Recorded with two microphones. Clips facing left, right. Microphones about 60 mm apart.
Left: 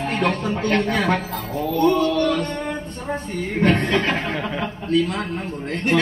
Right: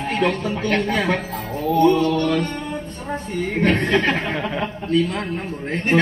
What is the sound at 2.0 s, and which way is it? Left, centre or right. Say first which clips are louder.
Music: even; left.